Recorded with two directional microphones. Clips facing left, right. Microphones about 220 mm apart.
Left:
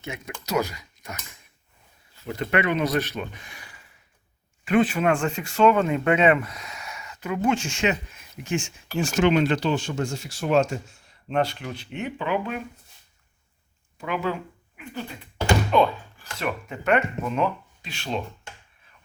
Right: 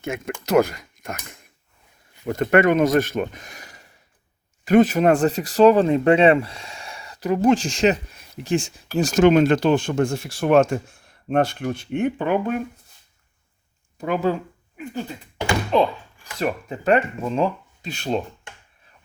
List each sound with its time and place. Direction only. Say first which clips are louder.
0.0 s speech: right 8 dB; 50° right (ahead or behind)
14.0 s speech: right 6 dB; 40° right (ahead or behind)
15.7 s speech: right 1 dB; 30° right (ahead or behind)